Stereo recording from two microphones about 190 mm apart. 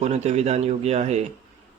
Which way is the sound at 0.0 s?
35° right (ahead or behind).